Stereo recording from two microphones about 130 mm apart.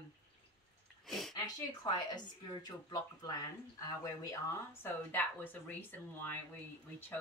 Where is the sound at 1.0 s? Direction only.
Centre (ahead or behind).